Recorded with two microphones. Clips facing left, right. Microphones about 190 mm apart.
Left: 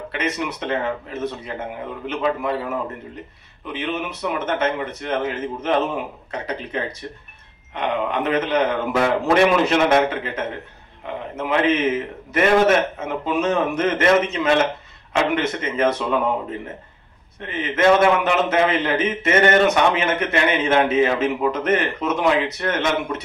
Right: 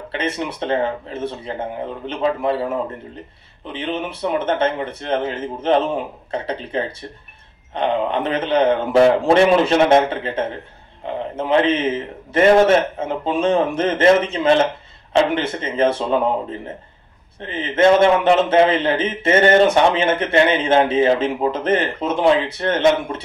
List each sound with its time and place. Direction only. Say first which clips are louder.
0.1 s a man's voice: right 2 dB; 30° right (ahead or behind)